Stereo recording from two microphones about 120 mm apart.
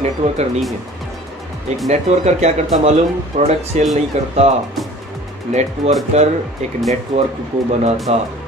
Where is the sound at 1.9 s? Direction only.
70° right (ahead or behind).